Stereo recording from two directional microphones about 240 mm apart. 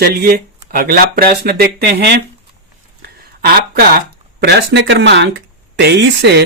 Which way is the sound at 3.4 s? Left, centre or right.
Right.